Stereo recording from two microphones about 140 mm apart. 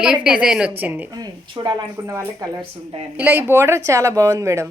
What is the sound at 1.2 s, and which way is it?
A woman's voice, 30° right (ahead or behind).